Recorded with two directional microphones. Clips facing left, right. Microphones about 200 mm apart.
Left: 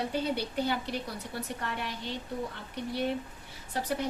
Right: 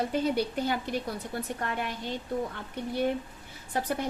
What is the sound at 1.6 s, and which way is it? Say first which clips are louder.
Speech: right 3 dB; 50° right (ahead or behind).